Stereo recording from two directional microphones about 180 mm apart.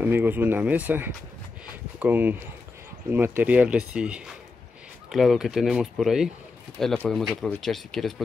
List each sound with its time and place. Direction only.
0.0 s speech: 10° right (ahead or behind)